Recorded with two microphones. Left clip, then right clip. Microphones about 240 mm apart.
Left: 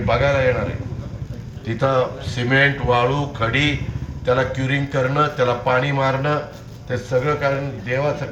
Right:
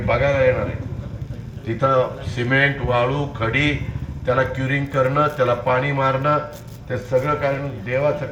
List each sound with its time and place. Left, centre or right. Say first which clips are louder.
0.0 s a man's voice: even; left